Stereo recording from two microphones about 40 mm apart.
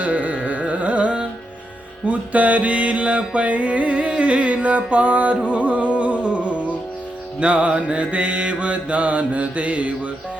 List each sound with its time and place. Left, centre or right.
0.0 s carnatic music: right
2.0 s music: right